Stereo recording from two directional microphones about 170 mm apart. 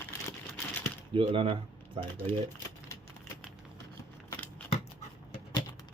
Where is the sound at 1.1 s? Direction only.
30° right (ahead or behind).